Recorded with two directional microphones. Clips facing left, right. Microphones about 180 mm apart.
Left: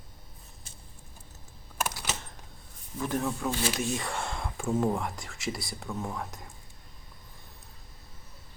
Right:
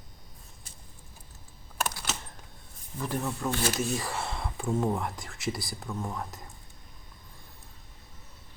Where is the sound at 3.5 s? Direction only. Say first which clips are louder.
Right 1 dB; 45° right (ahead or behind).